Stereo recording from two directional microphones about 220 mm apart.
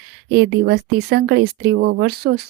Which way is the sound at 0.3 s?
50° right (ahead or behind).